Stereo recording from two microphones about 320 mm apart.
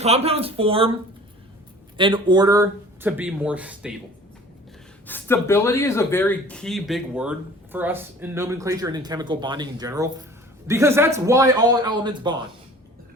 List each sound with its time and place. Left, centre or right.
0.0 s speech: centre
2.0 s speech: centre
5.0 s speech: centre